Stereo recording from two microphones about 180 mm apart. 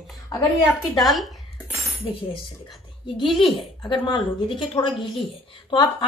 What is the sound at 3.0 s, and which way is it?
A woman's voice, 30° left (ahead or behind).